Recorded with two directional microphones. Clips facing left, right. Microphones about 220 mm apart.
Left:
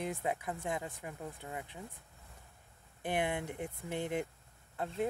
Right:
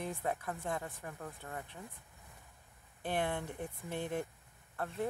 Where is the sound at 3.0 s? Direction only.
15° left (ahead or behind).